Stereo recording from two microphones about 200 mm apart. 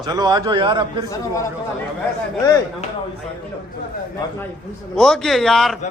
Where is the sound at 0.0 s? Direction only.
20° right (ahead or behind).